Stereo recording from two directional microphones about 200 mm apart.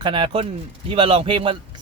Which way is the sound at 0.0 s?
25° right (ahead or behind).